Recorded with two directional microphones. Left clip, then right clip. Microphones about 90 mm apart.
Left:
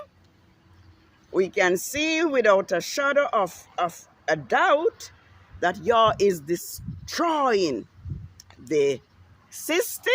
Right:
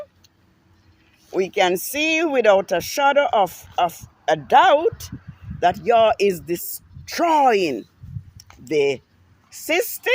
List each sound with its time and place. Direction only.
1.3 s speech: 15° right (ahead or behind); by 5.1 s 30° right (ahead or behind)
5.5 s speech: 20° right (ahead or behind)
8.4 s a sound: 20° right (ahead or behind)
9.5 s a woman's voice: 5° right (ahead or behind)